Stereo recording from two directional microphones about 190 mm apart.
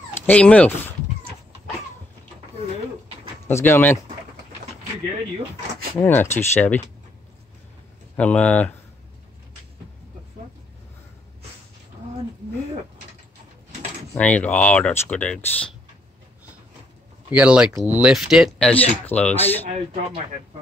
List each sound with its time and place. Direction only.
0.3 s speech: 5° left (ahead or behind)
3.4 s speech: 10° left (ahead or behind)
5.9 s speech: 10° left (ahead or behind)
8.2 s speech: 5° left (ahead or behind)
14.1 s speech: 5° left (ahead or behind)
17.3 s speech: 5° right (ahead or behind); by 19.6 s 10° left (ahead or behind)
19.7 s speech: 30° right (ahead or behind)